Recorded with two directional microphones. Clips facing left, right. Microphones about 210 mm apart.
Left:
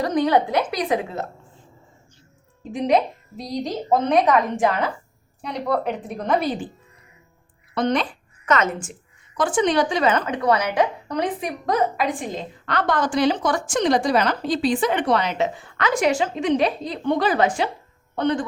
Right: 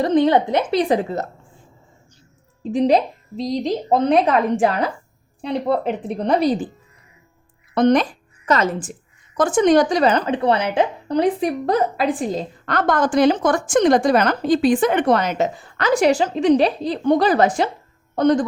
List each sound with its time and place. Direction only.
0.0 s a woman's voice: 25° right (ahead or behind)
2.7 s a woman's voice: 30° right (ahead or behind)
7.8 s a woman's voice: 45° right (ahead or behind)